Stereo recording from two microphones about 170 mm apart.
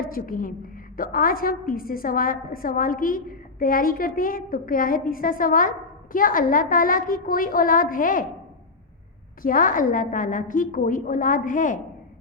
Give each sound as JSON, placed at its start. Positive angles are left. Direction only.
{"t": 0.0, "sound": "a woman's voice", "side_deg": 55}
{"t": 9.4, "sound": "a woman's voice", "side_deg": 55}